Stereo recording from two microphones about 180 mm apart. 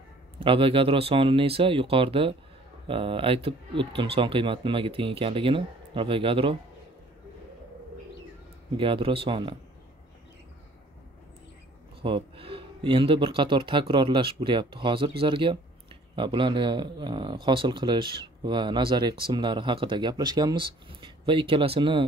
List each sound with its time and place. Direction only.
0.4 s speech: 30° right (ahead or behind)
8.7 s speech: 30° right (ahead or behind)
12.0 s speech: 30° right (ahead or behind)